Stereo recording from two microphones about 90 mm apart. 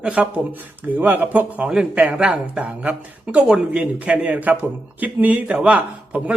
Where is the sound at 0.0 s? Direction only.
15° right (ahead or behind).